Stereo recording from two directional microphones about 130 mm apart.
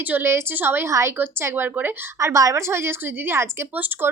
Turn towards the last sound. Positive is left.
turn(degrees=-15)  # may be behind; listen again after turning